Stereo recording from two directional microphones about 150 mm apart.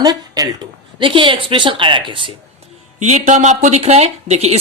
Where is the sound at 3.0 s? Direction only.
50° right (ahead or behind).